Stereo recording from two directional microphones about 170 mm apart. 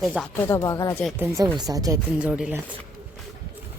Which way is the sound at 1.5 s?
20° right (ahead or behind).